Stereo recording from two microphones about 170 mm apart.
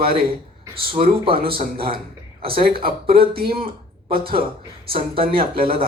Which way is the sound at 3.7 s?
60° right (ahead or behind).